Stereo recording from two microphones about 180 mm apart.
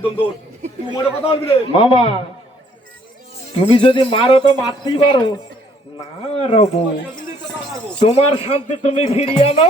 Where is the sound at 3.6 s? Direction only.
30° left (ahead or behind).